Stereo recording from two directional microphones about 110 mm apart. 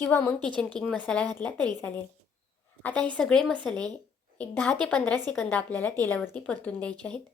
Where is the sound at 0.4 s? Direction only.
10° left (ahead or behind).